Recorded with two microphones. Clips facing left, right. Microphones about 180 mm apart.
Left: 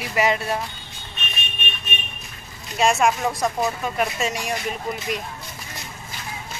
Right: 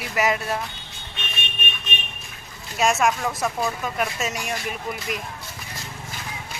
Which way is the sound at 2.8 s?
Centre (ahead or behind).